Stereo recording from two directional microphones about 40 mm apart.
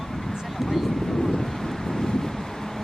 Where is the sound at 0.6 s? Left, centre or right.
Centre.